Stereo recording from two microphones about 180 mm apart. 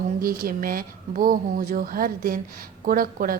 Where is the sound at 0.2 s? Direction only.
55° right (ahead or behind).